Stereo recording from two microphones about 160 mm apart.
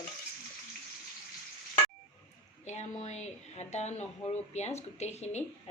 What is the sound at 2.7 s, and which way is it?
A woman's voice, 45° left (ahead or behind).